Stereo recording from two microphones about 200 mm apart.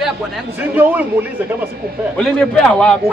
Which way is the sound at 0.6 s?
10° right (ahead or behind).